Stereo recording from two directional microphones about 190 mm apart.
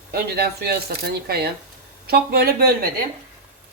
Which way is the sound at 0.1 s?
55° right (ahead or behind).